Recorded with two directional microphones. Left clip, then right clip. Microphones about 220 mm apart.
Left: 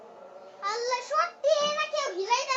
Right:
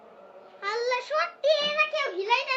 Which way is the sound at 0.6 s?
40° right (ahead or behind).